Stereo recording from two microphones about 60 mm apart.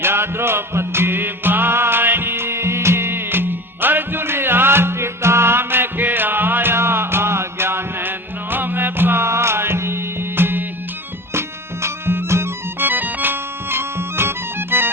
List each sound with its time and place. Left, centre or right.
0.0 s music: right
12.9 s music: right